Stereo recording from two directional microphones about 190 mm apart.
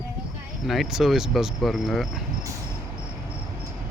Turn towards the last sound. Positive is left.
turn(degrees=0)  # may be behind; listen again after turning